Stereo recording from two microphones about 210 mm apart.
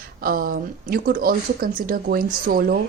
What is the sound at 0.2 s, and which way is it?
A woman's voice, 45° right (ahead or behind).